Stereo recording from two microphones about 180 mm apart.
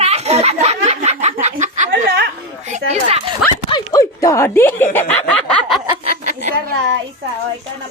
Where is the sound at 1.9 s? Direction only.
65° right (ahead or behind).